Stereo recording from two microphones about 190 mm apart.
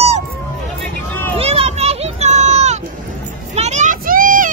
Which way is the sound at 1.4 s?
30° right (ahead or behind).